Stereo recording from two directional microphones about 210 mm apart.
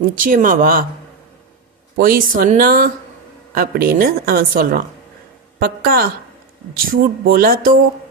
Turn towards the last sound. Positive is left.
turn(degrees=-45)  # may be behind; listen again after turning